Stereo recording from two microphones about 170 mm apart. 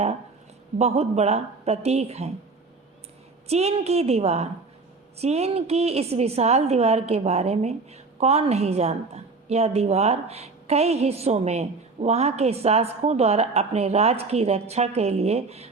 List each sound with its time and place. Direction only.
0.8 s a woman's voice: 40° right (ahead or behind)
3.4 s a woman's voice: 35° right (ahead or behind)